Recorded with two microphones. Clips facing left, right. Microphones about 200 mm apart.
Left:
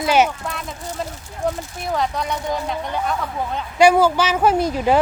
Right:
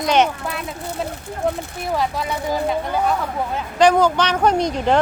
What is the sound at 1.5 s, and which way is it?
Speech, centre (ahead or behind).